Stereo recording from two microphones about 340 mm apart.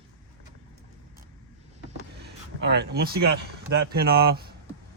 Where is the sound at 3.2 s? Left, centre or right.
Right.